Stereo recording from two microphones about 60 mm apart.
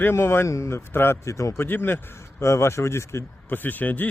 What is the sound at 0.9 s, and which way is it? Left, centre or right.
Speech, left.